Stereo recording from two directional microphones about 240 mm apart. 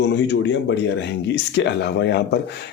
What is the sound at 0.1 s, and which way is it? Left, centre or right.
Speech, left.